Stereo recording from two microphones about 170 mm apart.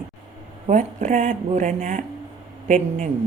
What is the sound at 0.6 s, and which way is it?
A woman's voice, 45° right (ahead or behind).